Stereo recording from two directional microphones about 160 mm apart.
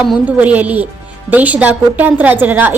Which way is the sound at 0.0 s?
10° right (ahead or behind).